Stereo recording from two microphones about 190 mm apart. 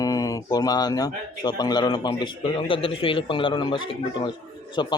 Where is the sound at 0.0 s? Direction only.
20° left (ahead or behind).